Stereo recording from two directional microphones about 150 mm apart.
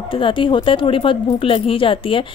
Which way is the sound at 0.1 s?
35° left (ahead or behind).